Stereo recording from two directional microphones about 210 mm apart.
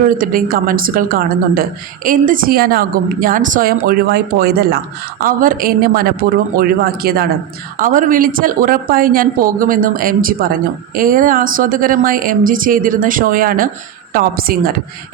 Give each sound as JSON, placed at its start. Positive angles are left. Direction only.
{"t": 0.2, "sound": "speech", "side_deg": -45}